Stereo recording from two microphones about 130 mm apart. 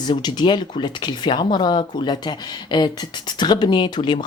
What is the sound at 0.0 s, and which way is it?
Speech, 35° left (ahead or behind).